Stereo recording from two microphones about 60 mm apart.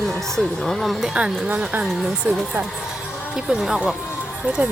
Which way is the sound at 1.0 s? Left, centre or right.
Centre.